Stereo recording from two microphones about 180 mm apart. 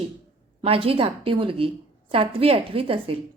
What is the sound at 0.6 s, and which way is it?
A woman's voice, 30° right (ahead or behind).